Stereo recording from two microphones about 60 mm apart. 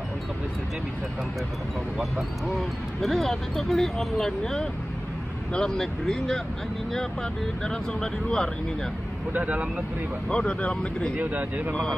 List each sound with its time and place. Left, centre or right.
3.0 s speech: centre
7.6 s speech: centre
9.3 s speech: right
10.3 s speech: centre
11.1 s speech: right